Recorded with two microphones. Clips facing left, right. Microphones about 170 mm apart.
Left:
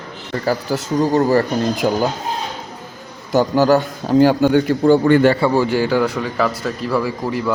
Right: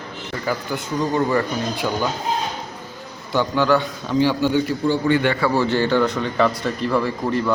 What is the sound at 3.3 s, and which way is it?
A man's voice, 40° left (ahead or behind).